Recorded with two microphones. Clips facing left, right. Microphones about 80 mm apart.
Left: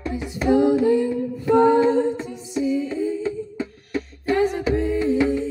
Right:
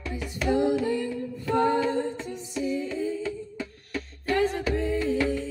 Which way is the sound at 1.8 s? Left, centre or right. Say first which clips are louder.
Left 8 dB; left.